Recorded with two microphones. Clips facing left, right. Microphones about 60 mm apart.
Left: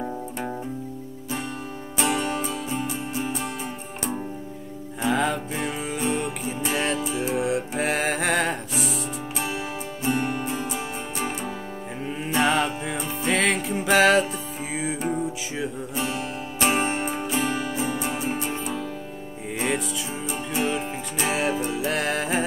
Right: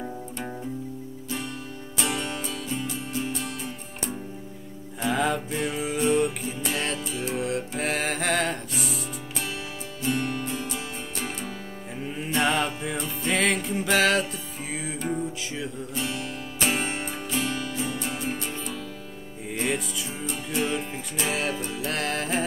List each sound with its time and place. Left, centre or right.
2.1 s music: centre
5.0 s music: centre
10.0 s music: left
13.3 s music: centre